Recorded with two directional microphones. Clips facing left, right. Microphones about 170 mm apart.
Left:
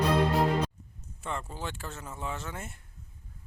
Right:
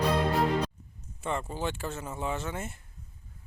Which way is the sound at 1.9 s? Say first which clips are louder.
Right 5 dB; 20° right (ahead or behind).